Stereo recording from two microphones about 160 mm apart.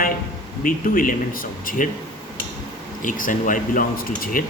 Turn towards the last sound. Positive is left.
turn(degrees=60)  # may be behind; listen again after turning